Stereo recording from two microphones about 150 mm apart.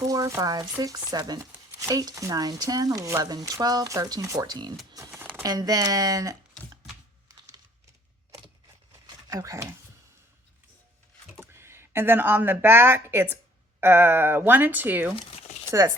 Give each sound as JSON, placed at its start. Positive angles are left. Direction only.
{"t": 0.1, "sound": "speech", "side_deg": -20}
{"t": 4.9, "sound": "a sound", "side_deg": -20}
{"t": 5.4, "sound": "speech", "side_deg": -25}
{"t": 7.3, "sound": "typing", "side_deg": -25}
{"t": 9.0, "sound": "speech", "side_deg": -25}
{"t": 11.5, "sound": "speech", "side_deg": -15}
{"t": 15.1, "sound": "a sound", "side_deg": 40}
{"t": 15.8, "sound": "speech", "side_deg": -15}